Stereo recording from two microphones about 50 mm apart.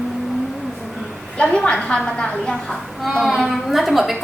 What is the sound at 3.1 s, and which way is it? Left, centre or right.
A woman's voice, centre.